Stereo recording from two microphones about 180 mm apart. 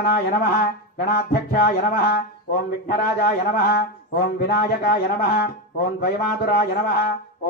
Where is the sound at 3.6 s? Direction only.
55° left (ahead or behind).